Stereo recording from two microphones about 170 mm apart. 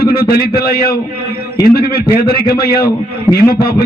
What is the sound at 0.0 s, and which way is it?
A man's voice, 65° left (ahead or behind).